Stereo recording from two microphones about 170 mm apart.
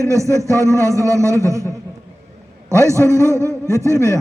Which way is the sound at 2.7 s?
15° right (ahead or behind).